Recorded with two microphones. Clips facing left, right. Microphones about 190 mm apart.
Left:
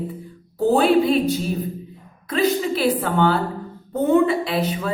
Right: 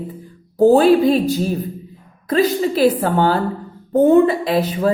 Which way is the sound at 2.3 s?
40° right (ahead or behind).